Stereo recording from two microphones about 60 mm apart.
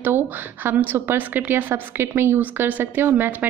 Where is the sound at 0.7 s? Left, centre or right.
Right.